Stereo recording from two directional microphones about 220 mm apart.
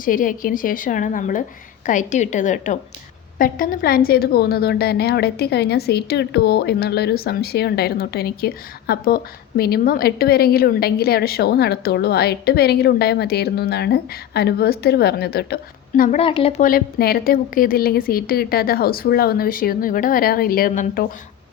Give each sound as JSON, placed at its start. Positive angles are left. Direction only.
{"t": 0.0, "sound": "a woman's voice", "side_deg": 40}
{"t": 16.0, "sound": "a woman's voice", "side_deg": 25}